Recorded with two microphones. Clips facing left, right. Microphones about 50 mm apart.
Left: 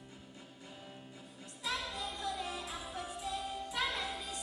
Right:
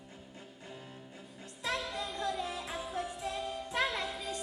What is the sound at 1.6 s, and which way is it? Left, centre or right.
Music, right.